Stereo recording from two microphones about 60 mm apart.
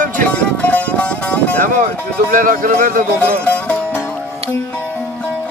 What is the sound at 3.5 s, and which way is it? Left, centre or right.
Music, left.